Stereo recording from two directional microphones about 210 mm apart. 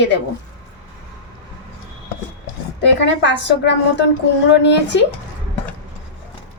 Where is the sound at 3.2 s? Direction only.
55° left (ahead or behind).